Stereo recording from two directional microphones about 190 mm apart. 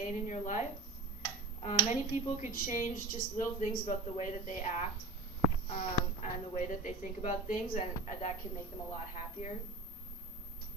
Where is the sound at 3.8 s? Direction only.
40° left (ahead or behind).